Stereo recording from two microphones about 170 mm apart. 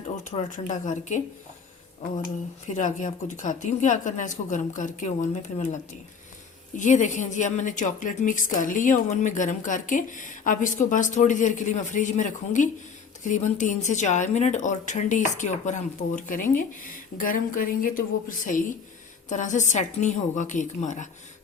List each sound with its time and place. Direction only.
0.3 s a woman's voice: 45° left (ahead or behind)
2.6 s a woman's voice: 45° left (ahead or behind)